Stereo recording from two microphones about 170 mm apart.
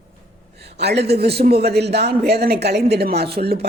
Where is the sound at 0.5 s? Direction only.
75° right (ahead or behind).